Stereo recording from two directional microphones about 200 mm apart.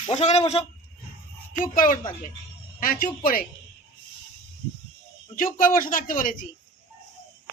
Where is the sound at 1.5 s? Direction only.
45° left (ahead or behind).